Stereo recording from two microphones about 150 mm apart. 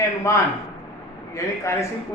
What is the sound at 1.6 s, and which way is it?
Speech, 20° left (ahead or behind).